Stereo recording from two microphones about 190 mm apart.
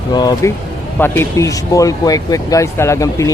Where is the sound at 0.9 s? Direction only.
10° left (ahead or behind).